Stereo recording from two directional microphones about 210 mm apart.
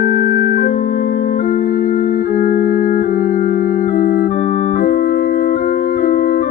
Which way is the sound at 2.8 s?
40° left (ahead or behind).